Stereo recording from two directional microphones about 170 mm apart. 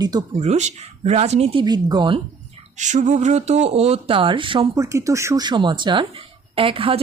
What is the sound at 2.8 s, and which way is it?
Speech, 45° right (ahead or behind).